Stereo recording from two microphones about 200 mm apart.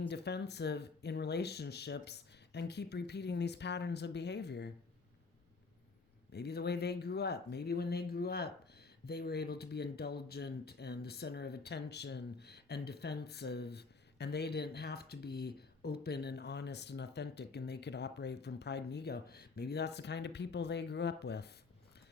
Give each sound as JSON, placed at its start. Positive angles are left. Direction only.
{"t": 0.1, "sound": "speech", "side_deg": 55}
{"t": 6.3, "sound": "speech", "side_deg": 55}